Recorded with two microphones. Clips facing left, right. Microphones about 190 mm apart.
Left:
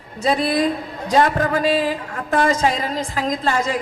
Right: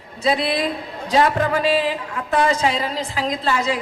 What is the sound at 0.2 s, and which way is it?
A man's voice, 45° left (ahead or behind).